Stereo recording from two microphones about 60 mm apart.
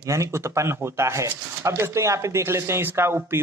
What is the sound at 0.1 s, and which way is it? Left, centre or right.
Speech, right.